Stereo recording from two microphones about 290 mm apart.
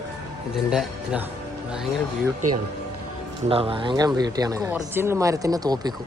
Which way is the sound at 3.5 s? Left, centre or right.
Centre.